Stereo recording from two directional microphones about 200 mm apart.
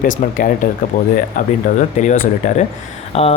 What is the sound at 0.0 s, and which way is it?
Speech, 45° left (ahead or behind).